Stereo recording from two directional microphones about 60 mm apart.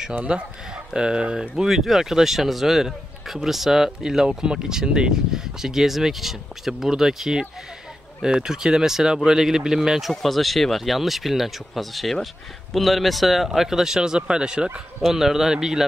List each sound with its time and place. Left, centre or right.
0.1 s speech: right
1.6 s speech: centre
15.0 s speech: centre